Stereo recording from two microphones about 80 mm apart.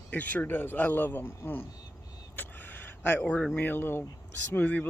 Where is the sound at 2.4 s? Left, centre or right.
Left.